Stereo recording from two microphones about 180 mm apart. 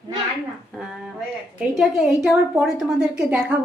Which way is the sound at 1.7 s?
Centre (ahead or behind).